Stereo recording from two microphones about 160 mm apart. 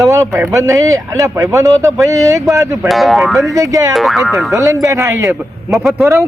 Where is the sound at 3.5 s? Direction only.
20° right (ahead or behind).